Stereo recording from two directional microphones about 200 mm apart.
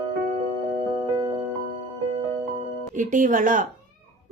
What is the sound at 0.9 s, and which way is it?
Music, 20° right (ahead or behind).